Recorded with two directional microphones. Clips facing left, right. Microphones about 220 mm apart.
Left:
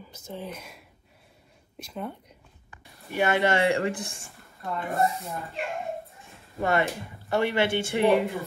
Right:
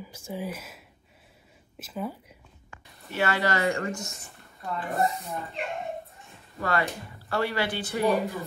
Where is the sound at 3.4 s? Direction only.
30° left (ahead or behind).